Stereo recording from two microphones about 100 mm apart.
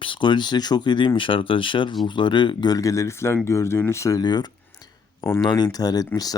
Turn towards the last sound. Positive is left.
turn(degrees=40)  # may be behind; listen again after turning